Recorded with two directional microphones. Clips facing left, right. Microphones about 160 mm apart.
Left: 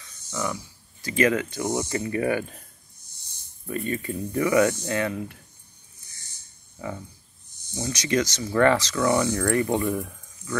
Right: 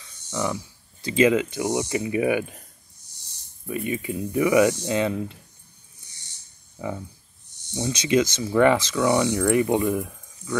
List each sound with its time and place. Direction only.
0.3 s speech: 20° right (ahead or behind)
3.6 s speech: 10° right (ahead or behind)
7.7 s speech: 25° right (ahead or behind)